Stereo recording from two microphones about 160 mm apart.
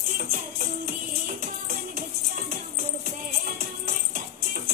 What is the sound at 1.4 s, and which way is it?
Music, 70° right (ahead or behind).